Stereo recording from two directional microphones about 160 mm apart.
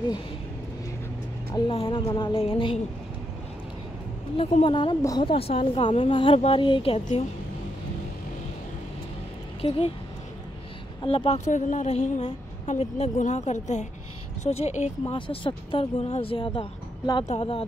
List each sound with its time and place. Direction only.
1.5 s speech: 35° left (ahead or behind)
4.4 s speech: 35° left (ahead or behind)
9.6 s speech: 35° left (ahead or behind)
11.0 s speech: 35° left (ahead or behind)
15.1 s speech: 30° left (ahead or behind)